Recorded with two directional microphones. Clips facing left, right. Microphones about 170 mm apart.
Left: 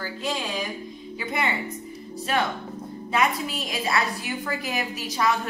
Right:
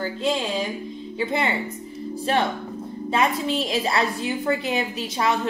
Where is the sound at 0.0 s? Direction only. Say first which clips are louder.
Right 5 dB; 25° right (ahead or behind).